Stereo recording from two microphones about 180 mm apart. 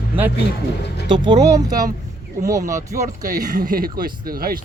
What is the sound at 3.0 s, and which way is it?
Speech, 45° right (ahead or behind).